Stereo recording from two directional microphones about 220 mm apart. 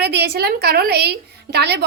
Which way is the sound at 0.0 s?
50° right (ahead or behind).